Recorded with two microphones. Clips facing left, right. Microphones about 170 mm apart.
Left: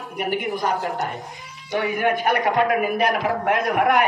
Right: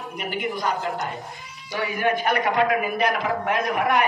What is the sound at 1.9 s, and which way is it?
A man's voice, 60° left (ahead or behind).